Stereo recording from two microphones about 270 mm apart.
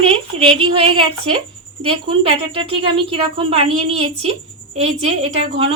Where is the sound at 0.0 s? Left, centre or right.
Centre.